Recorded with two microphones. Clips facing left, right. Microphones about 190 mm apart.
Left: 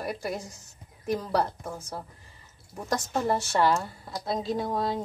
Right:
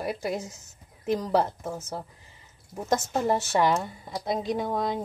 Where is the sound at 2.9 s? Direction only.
15° right (ahead or behind).